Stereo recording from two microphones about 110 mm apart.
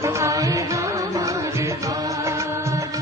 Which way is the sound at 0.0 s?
30° right (ahead or behind).